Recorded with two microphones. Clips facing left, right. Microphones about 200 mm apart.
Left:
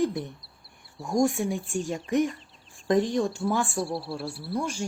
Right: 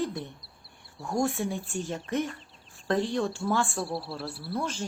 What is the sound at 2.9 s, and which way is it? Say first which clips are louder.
Speech: left 4 dB; 15° left (ahead or behind).